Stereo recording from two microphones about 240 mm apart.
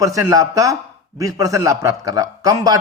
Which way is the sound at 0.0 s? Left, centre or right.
Centre.